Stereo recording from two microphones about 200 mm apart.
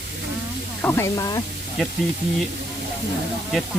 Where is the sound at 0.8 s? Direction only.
10° left (ahead or behind).